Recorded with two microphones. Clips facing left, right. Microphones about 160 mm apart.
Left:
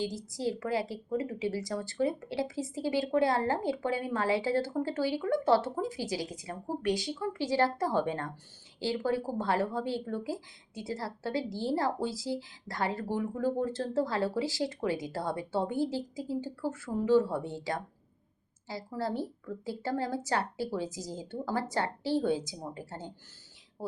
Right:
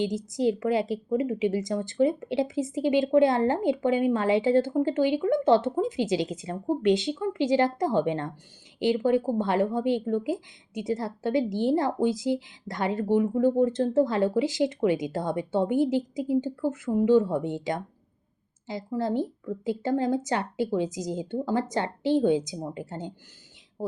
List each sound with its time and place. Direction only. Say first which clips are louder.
0.0 s a woman's voice: right 8 dB; 20° right (ahead or behind)